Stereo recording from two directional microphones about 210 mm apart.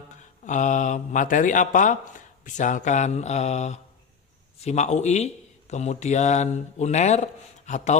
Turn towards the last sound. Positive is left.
turn(degrees=35)  # may be behind; listen again after turning